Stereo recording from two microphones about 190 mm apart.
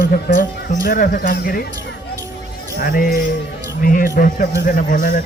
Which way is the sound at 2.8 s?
50° left (ahead or behind).